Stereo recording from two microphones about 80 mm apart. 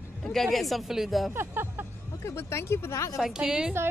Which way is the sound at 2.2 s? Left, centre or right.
Left.